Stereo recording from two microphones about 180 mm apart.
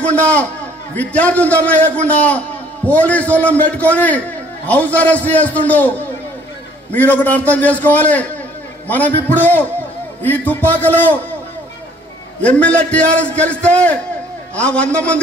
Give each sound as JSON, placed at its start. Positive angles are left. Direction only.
{"t": 0.0, "sound": "a man's voice", "side_deg": 5}
{"t": 12.4, "sound": "a man's voice", "side_deg": 5}